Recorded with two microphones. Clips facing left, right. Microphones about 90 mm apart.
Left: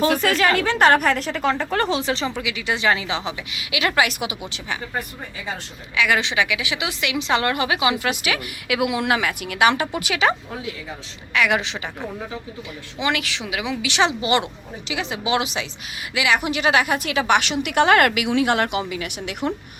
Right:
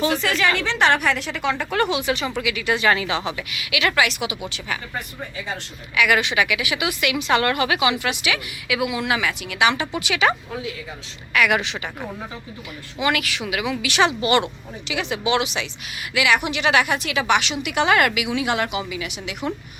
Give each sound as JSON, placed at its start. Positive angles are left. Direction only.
{"t": 0.0, "sound": "a woman's voice", "side_deg": 50}
{"t": 6.0, "sound": "a woman's voice", "side_deg": 25}
{"t": 11.3, "sound": "a woman's voice", "side_deg": 25}
{"t": 13.0, "sound": "a woman's voice", "side_deg": 25}